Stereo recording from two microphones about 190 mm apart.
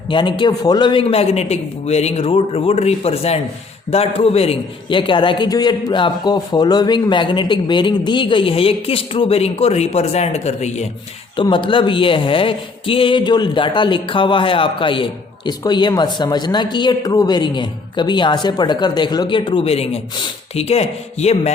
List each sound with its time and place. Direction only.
0.1 s a man's voice: 25° left (ahead or behind)
11.3 s speech: 25° left (ahead or behind)